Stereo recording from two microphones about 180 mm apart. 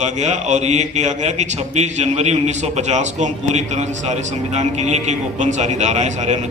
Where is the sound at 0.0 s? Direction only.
40° right (ahead or behind).